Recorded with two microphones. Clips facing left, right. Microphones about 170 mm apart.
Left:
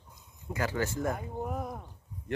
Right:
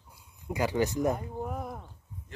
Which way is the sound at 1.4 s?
Centre (ahead or behind).